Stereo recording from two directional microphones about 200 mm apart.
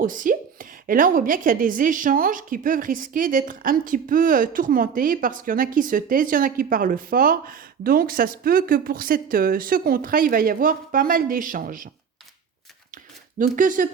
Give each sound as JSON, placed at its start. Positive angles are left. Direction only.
{"t": 0.0, "sound": "a woman's voice", "side_deg": -45}
{"t": 13.4, "sound": "speech", "side_deg": -40}